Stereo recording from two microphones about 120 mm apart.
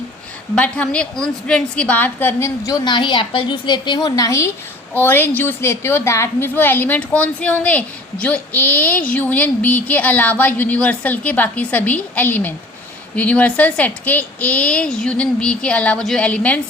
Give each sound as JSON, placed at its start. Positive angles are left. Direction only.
{"t": 0.5, "sound": "a woman's voice", "side_deg": 10}